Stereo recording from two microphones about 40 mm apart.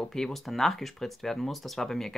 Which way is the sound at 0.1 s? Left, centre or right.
Centre.